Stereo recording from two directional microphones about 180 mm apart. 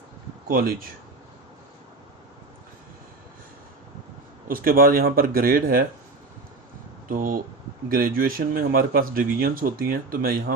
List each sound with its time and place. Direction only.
0.4 s speech: 55° right (ahead or behind)
4.4 s speech: 50° right (ahead or behind)
7.1 s speech: 50° right (ahead or behind)